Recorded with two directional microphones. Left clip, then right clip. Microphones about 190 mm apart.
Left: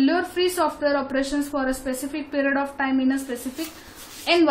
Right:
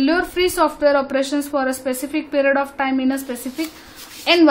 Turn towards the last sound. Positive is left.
turn(degrees=-45)  # may be behind; listen again after turning